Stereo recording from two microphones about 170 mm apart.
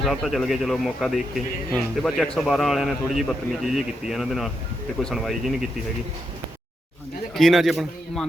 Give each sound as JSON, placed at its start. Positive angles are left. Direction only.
{"t": 0.0, "sound": "a man's voice", "side_deg": 0}
{"t": 7.3, "sound": "a man's voice", "side_deg": 0}